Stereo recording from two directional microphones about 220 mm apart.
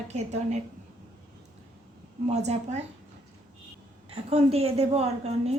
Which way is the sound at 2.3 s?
30° right (ahead or behind).